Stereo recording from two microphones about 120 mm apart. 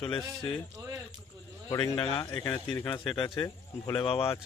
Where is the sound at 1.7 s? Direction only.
50° left (ahead or behind).